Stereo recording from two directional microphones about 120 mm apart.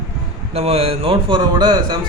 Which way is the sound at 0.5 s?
60° right (ahead or behind).